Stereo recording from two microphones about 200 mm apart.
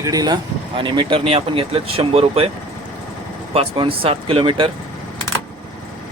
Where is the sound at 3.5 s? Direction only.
30° right (ahead or behind).